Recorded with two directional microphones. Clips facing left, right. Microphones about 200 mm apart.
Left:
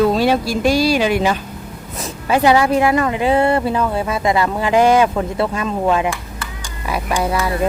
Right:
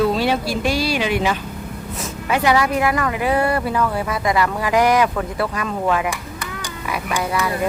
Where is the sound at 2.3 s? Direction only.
30° left (ahead or behind).